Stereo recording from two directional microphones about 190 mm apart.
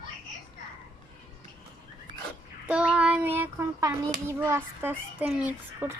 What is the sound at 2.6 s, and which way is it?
A child's voice, 5° right (ahead or behind).